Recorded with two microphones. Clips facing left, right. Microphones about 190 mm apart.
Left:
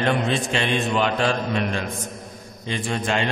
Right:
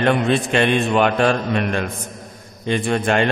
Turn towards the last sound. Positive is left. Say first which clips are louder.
# right 6 dB
turn(degrees=-55)  # may be behind; listen again after turning